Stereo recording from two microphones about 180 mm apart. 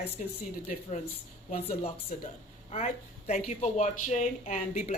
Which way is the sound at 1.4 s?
35° left (ahead or behind).